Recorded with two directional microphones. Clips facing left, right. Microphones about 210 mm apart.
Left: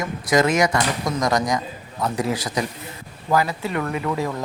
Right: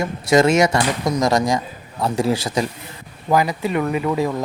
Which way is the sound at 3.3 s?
15° right (ahead or behind).